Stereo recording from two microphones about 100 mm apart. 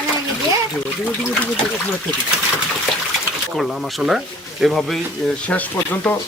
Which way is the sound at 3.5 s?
Centre (ahead or behind).